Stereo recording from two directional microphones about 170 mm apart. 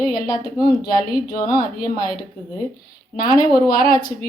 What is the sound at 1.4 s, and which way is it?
Speech, 25° left (ahead or behind).